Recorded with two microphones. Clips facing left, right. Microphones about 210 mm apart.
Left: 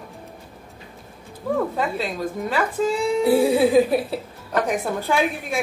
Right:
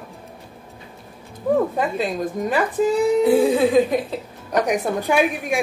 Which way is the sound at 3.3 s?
10° left (ahead or behind).